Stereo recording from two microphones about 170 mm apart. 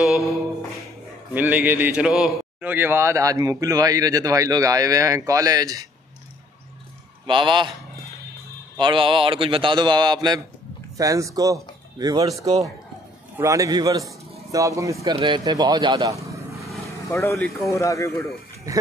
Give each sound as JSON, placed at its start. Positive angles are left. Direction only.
{"t": 1.3, "sound": "a man's voice", "side_deg": -10}
{"t": 7.2, "sound": "a man's voice", "side_deg": -30}
{"t": 8.7, "sound": "a man's voice", "side_deg": -30}
{"t": 13.4, "sound": "a man's voice", "side_deg": -20}
{"t": 15.1, "sound": "speech", "side_deg": -30}
{"t": 17.1, "sound": "speech", "side_deg": 15}